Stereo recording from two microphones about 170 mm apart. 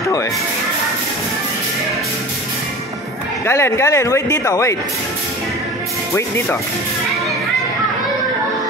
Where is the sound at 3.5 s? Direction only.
15° left (ahead or behind).